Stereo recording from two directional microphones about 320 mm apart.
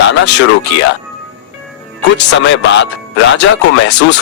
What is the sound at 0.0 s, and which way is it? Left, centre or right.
Speech, left.